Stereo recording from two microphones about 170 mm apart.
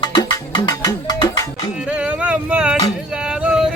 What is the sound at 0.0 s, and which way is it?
Music, 25° left (ahead or behind).